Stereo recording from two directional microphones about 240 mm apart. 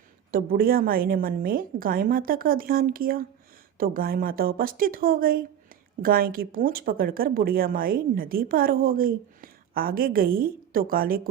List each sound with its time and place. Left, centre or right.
0.3 s a woman's voice: right